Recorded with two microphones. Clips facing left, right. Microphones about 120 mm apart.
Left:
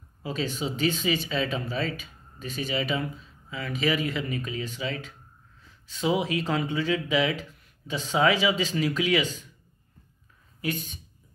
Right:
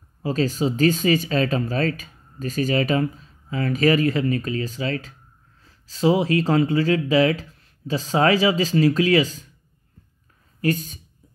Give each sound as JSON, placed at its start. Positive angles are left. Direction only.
{"t": 0.2, "sound": "speech", "side_deg": -40}
{"t": 10.6, "sound": "speech", "side_deg": -40}